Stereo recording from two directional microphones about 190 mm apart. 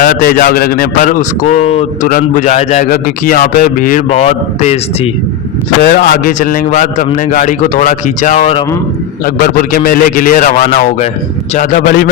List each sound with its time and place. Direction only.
0.0 s a man's voice: 50° left (ahead or behind); by 2.0 s 35° left (ahead or behind)
2.0 s a man's voice: 45° left (ahead or behind)
5.8 s a man's voice: 50° left (ahead or behind)